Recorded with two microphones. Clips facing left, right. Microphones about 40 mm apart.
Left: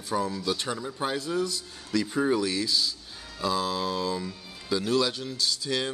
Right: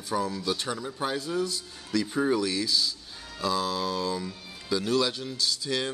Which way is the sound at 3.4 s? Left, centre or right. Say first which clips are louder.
Even; left.